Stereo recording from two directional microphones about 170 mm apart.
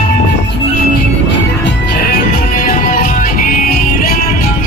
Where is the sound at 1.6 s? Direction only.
80° left.